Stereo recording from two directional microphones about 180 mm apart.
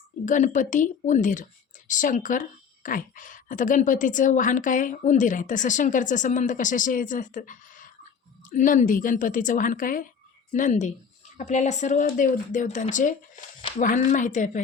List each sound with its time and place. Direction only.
0.3 s a woman's voice: 45° left (ahead or behind)